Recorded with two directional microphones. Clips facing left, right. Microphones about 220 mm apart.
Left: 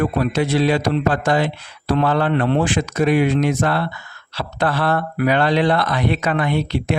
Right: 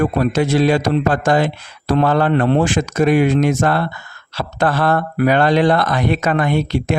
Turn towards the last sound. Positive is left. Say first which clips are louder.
# right 2 dB
turn(degrees=-45)  # may be behind; listen again after turning